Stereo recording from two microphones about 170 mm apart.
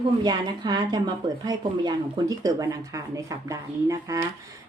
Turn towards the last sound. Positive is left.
turn(degrees=-20)  # may be behind; listen again after turning